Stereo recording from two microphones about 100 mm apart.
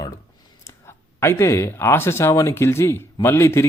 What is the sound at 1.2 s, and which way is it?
A man's voice, 25° left (ahead or behind).